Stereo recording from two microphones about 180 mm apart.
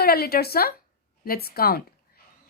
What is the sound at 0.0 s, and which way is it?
Speech, 60° left (ahead or behind).